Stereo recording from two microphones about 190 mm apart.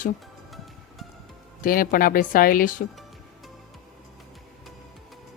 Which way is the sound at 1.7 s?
50° left (ahead or behind).